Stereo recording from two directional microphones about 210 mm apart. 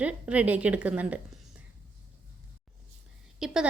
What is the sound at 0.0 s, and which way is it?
A woman's voice, 5° right (ahead or behind).